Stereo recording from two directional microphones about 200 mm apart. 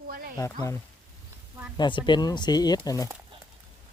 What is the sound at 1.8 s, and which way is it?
Speech, 25° left (ahead or behind).